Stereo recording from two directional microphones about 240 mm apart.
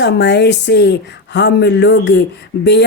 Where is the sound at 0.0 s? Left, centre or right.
Left.